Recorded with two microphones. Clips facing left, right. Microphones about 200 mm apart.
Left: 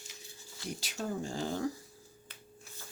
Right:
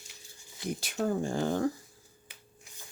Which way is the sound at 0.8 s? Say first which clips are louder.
Right 7 dB; 55° right (ahead or behind).